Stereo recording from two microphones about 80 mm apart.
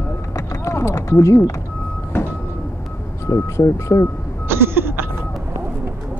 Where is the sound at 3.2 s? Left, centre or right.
Left.